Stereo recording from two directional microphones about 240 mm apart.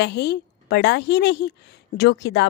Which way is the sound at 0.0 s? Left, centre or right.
Left.